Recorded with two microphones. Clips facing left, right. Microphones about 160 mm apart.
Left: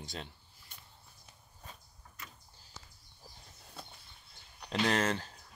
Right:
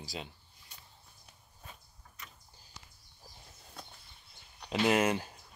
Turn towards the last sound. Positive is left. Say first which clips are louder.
# right 3 dB
turn(degrees=-10)  # may be behind; listen again after turning